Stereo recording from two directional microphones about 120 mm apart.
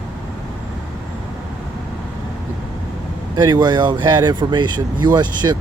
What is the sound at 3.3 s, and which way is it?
Speech, 35° right (ahead or behind).